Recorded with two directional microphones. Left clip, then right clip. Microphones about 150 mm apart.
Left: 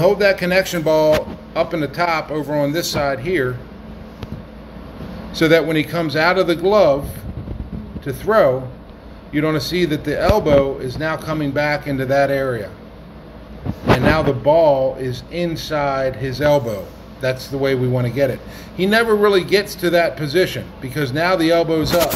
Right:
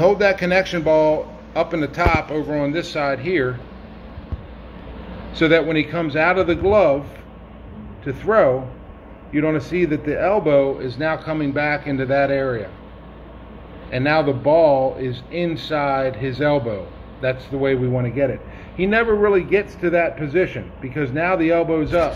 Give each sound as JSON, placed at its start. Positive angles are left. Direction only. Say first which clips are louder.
{"t": 0.0, "sound": "speech", "louder": "left 1 dB", "side_deg": -10}
{"t": 0.7, "sound": "a man's voice", "louder": "left 1 dB", "side_deg": 5}
{"t": 1.5, "sound": "speech", "louder": "left 1 dB", "side_deg": -10}
{"t": 3.0, "sound": "speech", "louder": "even", "side_deg": -5}
{"t": 5.4, "sound": "a man's voice", "louder": "left 2 dB", "side_deg": 15}
{"t": 8.0, "sound": "a man's voice", "louder": "left 1 dB", "side_deg": 10}
{"t": 14.0, "sound": "a man's voice", "louder": "right 2 dB", "side_deg": -5}